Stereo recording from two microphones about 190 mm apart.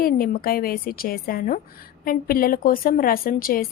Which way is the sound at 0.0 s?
50° left (ahead or behind).